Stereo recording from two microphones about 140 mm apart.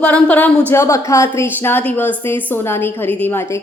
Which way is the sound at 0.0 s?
10° left (ahead or behind).